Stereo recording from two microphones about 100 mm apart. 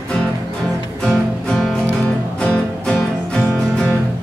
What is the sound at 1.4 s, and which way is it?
Music, 5° left (ahead or behind).